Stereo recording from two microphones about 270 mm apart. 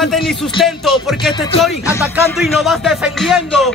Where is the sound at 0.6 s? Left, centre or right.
Centre.